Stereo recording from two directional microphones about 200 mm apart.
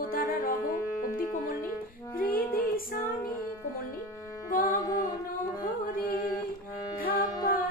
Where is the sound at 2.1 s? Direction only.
45° left (ahead or behind).